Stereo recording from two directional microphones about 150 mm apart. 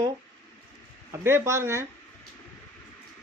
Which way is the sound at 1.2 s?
20° right (ahead or behind).